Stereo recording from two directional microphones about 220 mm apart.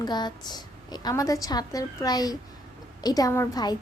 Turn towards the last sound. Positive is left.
turn(degrees=15)  # may be behind; listen again after turning